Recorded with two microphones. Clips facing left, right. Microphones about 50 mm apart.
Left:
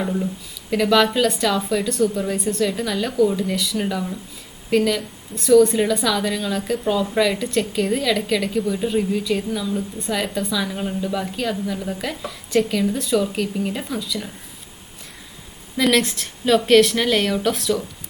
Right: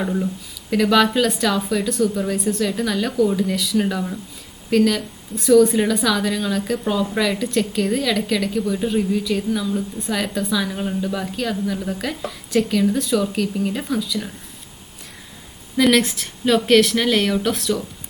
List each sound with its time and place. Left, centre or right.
0.0 s a woman's voice: centre
15.8 s a woman's voice: centre